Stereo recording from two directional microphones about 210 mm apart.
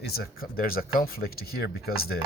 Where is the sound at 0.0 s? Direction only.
45° left (ahead or behind).